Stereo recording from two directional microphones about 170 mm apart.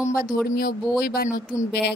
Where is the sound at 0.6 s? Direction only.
60° left (ahead or behind).